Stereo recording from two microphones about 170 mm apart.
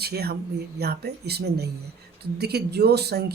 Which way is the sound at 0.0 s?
70° right (ahead or behind).